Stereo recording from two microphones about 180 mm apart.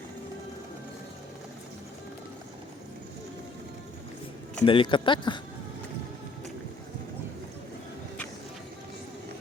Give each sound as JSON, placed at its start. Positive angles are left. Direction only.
{"t": 4.6, "sound": "speech", "side_deg": 30}